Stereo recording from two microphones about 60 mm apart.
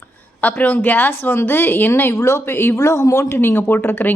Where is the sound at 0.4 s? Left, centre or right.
Left.